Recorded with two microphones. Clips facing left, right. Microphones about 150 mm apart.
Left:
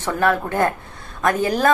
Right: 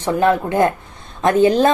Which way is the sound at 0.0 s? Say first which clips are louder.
Right 4 dB; 20° right (ahead or behind).